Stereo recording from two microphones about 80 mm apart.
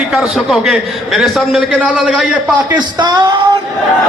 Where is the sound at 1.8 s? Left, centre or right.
Centre.